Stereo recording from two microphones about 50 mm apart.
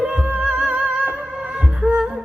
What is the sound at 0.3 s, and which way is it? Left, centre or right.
Music, right.